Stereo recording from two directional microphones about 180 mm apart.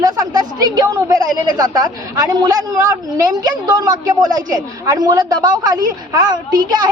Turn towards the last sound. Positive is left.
turn(degrees=-25)  # may be behind; listen again after turning